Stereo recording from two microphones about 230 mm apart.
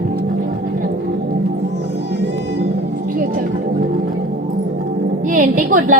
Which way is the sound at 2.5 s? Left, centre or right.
Right.